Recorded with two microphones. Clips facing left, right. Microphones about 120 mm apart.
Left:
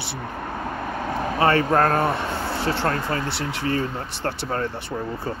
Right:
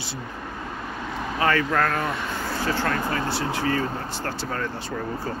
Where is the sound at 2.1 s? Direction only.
25° left (ahead or behind).